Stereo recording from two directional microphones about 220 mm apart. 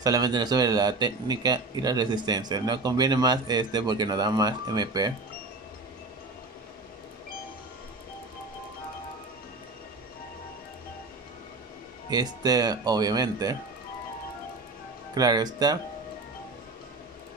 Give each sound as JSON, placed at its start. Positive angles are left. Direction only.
{"t": 0.0, "sound": "speech", "side_deg": -15}
{"t": 12.1, "sound": "speech", "side_deg": -20}
{"t": 15.1, "sound": "speech", "side_deg": -20}